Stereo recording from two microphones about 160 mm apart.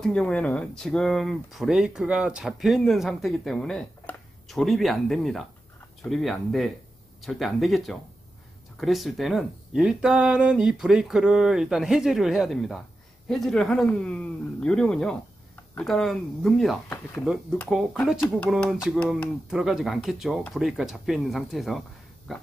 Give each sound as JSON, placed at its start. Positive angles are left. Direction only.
{"t": 0.0, "sound": "speech", "side_deg": 5}